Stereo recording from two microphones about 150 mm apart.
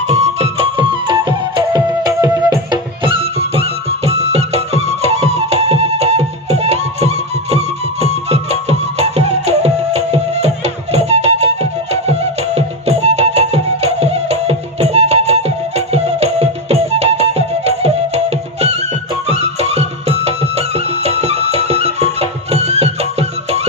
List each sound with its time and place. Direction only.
0.1 s music: 45° right (ahead or behind)